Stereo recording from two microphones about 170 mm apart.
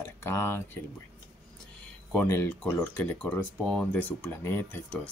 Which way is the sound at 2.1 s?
10° left (ahead or behind).